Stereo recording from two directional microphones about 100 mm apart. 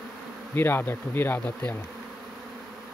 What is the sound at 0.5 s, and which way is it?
Speech, 20° left (ahead or behind).